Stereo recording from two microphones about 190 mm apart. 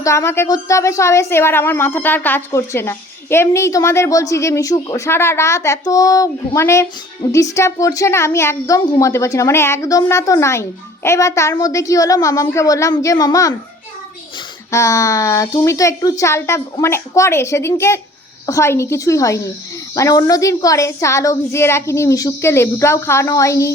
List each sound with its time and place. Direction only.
0.0 s a woman's voice: 15° left (ahead or behind)
14.7 s a woman's voice: 15° left (ahead or behind)